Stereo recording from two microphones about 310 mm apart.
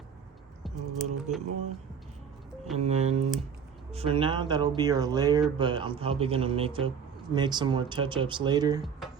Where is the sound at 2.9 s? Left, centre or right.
Right.